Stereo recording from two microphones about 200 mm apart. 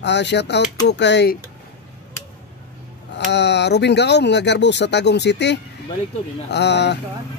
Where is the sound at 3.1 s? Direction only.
60° left (ahead or behind).